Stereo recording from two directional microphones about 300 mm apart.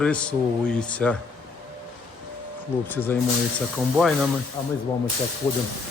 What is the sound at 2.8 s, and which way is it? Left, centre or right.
A man's voice, centre.